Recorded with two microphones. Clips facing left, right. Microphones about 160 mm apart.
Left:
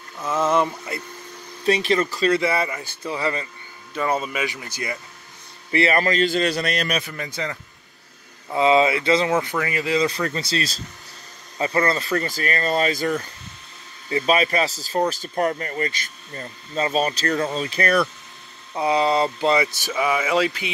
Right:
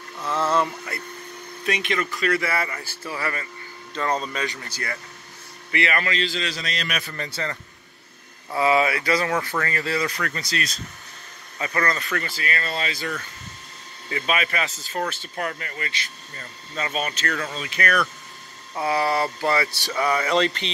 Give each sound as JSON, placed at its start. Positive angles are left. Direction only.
{"t": 0.2, "sound": "speech", "side_deg": 15}
{"t": 1.7, "sound": "speech", "side_deg": 35}
{"t": 3.9, "sound": "speech", "side_deg": 10}
{"t": 5.7, "sound": "a man's voice", "side_deg": 35}
{"t": 7.0, "sound": "speech", "side_deg": 10}
{"t": 18.8, "sound": "speech", "side_deg": 20}